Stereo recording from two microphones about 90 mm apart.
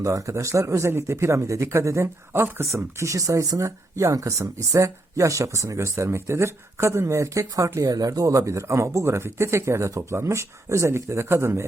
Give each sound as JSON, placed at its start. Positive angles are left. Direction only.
{"t": 0.0, "sound": "speech", "side_deg": -35}